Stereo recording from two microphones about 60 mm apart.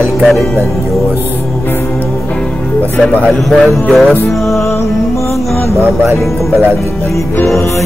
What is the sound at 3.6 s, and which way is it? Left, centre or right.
Music, centre.